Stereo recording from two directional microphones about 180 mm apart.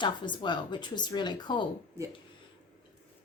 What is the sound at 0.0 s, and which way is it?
A woman's voice, 25° left (ahead or behind).